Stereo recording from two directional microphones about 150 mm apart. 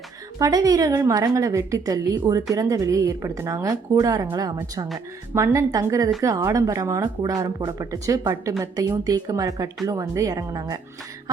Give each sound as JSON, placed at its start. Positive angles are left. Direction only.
{"t": 0.3, "sound": "a woman's voice", "side_deg": -25}